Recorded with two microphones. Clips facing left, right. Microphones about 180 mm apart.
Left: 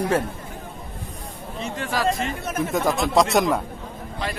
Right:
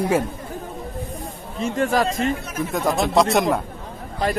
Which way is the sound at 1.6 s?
45° right (ahead or behind).